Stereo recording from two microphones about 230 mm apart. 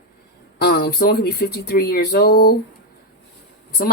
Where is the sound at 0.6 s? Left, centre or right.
Left.